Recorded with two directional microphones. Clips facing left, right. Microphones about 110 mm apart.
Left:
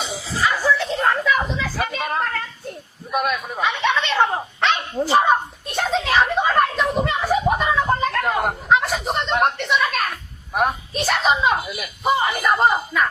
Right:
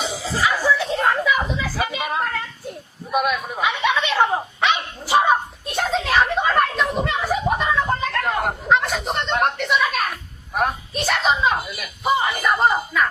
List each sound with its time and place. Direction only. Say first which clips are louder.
0.0 s chuckle: right 1 dB; centre (ahead or behind)
1.4 s a sound: even; 5° right (ahead or behind)
3.1 s bow-wow: right 1 dB; centre (ahead or behind)
5.1 s children playing: right 1 dB; centre (ahead or behind)